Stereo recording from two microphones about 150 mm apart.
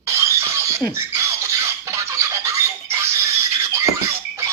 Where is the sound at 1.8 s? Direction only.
20° right (ahead or behind).